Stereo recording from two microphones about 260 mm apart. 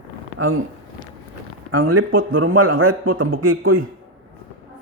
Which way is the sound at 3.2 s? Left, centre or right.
Right.